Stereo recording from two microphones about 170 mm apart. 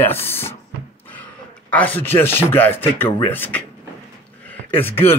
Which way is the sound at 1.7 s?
10° left (ahead or behind).